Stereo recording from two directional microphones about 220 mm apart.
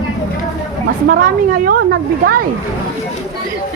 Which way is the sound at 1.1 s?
40° right (ahead or behind).